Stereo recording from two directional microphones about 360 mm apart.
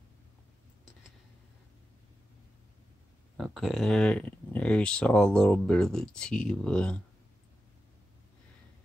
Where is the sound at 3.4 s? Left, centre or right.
Centre.